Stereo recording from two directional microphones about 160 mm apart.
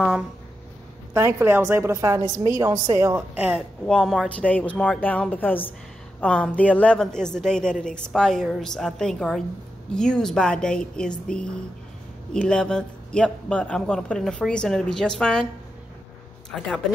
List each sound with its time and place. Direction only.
1.1 s a woman's voice: 15° right (ahead or behind)
3.8 s a man's voice: 5° left (ahead or behind)
16.5 s a man's voice: centre (ahead or behind)